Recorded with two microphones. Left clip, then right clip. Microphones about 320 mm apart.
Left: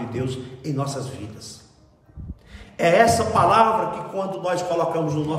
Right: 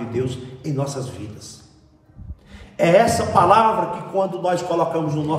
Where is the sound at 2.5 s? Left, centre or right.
Centre.